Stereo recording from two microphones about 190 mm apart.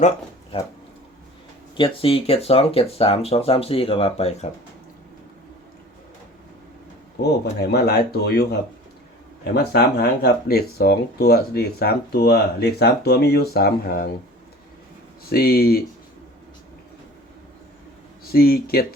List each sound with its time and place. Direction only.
1.7 s speech: 25° left (ahead or behind)
7.6 s speech: 60° left (ahead or behind)
9.6 s speech: 55° left (ahead or behind)
15.3 s speech: 55° left (ahead or behind)
18.3 s speech: 55° left (ahead or behind)